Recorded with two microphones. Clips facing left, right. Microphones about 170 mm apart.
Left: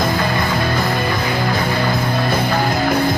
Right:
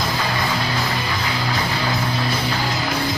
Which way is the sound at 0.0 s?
55° left (ahead or behind).